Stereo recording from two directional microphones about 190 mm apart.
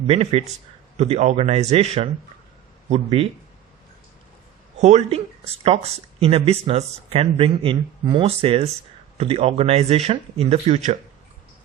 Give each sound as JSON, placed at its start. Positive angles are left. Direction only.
{"t": 0.1, "sound": "speech", "side_deg": -30}
{"t": 4.8, "sound": "speech", "side_deg": -40}